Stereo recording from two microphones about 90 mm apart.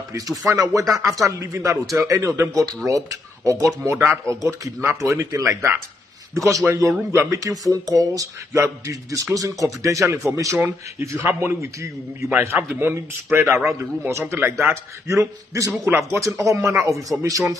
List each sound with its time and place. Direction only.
0.5 s speech: 35° right (ahead or behind)
12.4 s a man's voice: 20° right (ahead or behind); by 17.6 s 40° right (ahead or behind)